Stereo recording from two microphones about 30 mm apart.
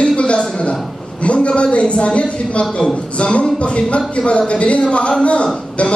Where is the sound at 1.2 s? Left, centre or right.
Left.